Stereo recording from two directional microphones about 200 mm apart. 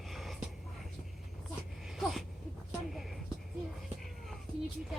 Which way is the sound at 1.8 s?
Centre (ahead or behind).